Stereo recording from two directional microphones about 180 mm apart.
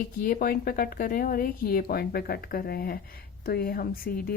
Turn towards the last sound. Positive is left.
turn(degrees=55)  # may be behind; listen again after turning